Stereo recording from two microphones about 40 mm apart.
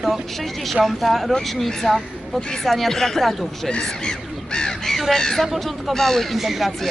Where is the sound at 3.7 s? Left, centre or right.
Left.